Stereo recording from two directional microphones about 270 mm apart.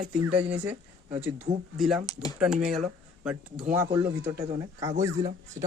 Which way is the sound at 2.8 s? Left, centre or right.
Centre.